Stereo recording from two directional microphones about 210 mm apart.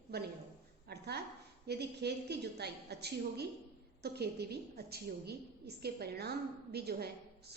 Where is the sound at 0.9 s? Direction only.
50° right (ahead or behind).